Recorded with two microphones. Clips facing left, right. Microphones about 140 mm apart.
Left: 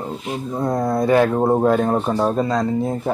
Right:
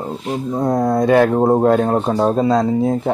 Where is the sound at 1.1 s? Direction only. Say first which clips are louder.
Right 2 dB; 20° right (ahead or behind).